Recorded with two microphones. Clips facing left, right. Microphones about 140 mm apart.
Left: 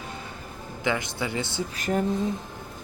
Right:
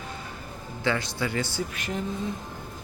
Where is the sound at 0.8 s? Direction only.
20° left (ahead or behind).